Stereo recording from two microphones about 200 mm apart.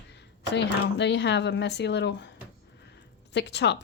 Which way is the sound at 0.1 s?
60° left (ahead or behind).